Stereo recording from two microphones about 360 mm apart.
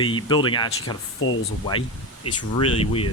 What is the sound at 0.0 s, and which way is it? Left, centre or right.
Speech, centre.